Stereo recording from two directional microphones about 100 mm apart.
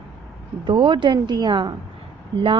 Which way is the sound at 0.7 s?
55° right (ahead or behind).